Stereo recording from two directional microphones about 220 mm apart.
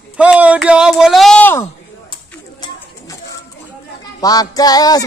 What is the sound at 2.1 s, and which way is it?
Bird, 20° left (ahead or behind).